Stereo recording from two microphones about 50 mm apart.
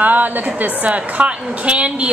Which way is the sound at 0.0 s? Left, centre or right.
Right.